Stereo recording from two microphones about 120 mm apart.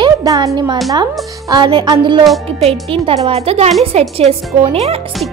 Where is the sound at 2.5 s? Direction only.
55° right (ahead or behind).